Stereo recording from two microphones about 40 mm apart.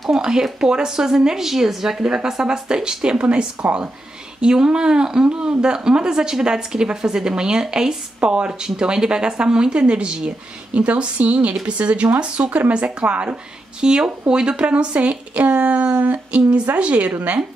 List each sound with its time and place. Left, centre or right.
0.1 s speech: centre
3.6 s speech: right
4.4 s a woman's voice: centre
16.0 s speech: right